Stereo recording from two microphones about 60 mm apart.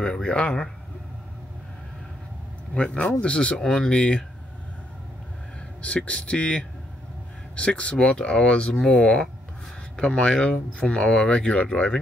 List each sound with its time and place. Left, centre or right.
0.0 s speech: centre
2.8 s speech: centre
5.8 s speech: centre